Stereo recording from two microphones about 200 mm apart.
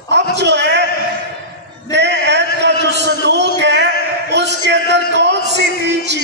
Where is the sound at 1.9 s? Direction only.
60° right (ahead or behind).